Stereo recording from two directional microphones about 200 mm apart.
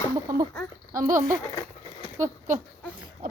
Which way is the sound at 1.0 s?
40° right (ahead or behind).